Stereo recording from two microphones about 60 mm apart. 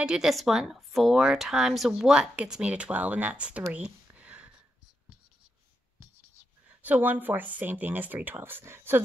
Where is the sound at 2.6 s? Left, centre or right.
Right.